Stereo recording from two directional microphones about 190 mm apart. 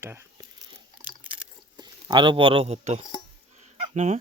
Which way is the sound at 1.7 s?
25° right (ahead or behind).